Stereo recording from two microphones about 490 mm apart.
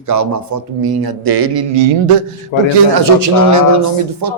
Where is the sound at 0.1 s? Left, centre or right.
Right.